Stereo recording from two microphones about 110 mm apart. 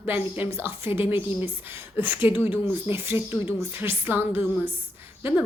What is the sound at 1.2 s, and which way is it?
Speech, 50° left (ahead or behind).